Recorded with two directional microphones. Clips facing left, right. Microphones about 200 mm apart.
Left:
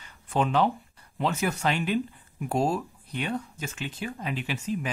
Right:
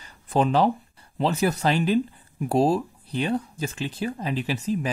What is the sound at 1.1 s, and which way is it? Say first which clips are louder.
Speech: right 4 dB; 35° right (ahead or behind).